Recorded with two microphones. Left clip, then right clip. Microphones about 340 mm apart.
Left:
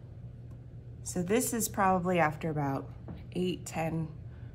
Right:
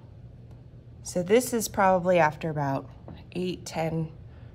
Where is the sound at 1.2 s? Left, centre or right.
Right.